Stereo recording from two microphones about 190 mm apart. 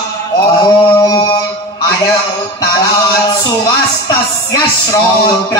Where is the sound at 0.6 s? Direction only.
20° left (ahead or behind).